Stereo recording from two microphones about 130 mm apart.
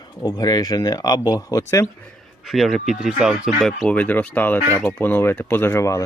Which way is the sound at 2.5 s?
Centre (ahead or behind).